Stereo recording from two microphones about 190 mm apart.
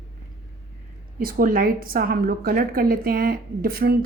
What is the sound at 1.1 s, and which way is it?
A woman's voice, 50° right (ahead or behind).